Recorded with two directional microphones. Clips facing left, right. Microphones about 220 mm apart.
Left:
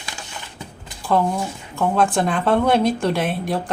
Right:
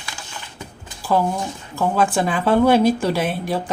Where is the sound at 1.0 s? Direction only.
Centre (ahead or behind).